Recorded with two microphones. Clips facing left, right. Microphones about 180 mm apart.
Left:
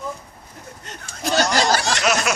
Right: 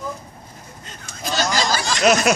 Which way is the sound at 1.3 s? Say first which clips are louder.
Left 3 dB; 65° left (ahead or behind).